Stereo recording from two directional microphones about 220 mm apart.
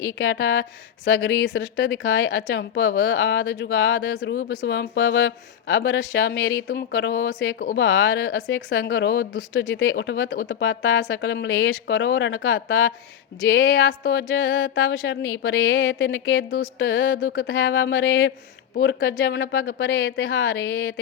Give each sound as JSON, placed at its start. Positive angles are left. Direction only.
{"t": 0.2, "sound": "speech", "side_deg": 65}
{"t": 17.5, "sound": "speech", "side_deg": 60}